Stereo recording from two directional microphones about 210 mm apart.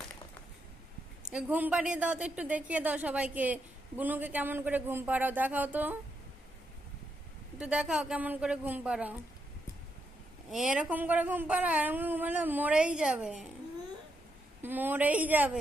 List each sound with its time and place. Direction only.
1.2 s a woman's voice: 5° right (ahead or behind)
7.6 s a woman's voice: 5° right (ahead or behind)
10.5 s a woman's voice: 5° right (ahead or behind)
14.6 s a woman's voice: 10° right (ahead or behind)